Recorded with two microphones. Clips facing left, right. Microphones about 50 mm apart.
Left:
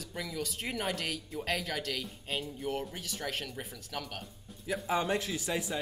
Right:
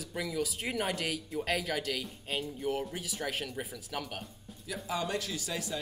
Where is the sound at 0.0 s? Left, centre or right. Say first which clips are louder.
Right 3 dB; centre.